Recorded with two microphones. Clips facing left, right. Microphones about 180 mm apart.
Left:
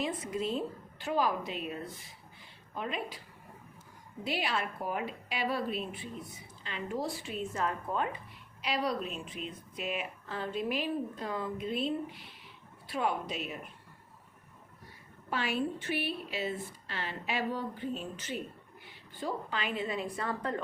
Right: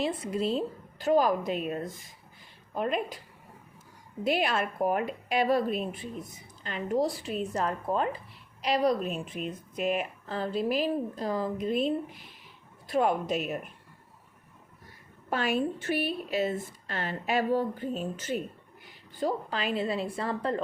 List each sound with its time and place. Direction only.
0.0 s a woman's voice: 30° right (ahead or behind); by 3.2 s 45° right (ahead or behind)
4.2 s a woman's voice: 50° right (ahead or behind)
15.3 s a woman's voice: 45° right (ahead or behind); by 20.6 s 30° right (ahead or behind)